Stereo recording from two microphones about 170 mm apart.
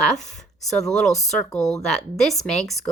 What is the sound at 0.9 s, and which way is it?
Speech, centre (ahead or behind).